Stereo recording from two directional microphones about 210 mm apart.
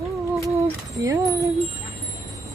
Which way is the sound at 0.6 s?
15° right (ahead or behind).